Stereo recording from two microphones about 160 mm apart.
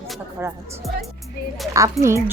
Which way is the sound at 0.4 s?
15° right (ahead or behind).